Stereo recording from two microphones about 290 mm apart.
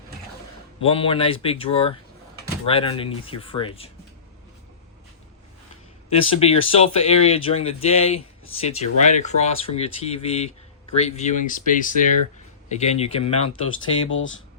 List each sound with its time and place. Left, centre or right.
0.8 s speech: centre
6.1 s speech: left
14.1 s speech: left